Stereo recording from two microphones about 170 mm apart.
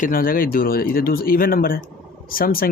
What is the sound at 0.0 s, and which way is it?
Speech, 55° left (ahead or behind).